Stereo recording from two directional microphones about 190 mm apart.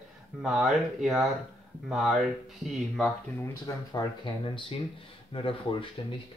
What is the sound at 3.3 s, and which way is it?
Speech, 20° left (ahead or behind).